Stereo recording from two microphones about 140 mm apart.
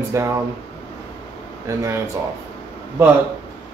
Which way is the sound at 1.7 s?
25° right (ahead or behind).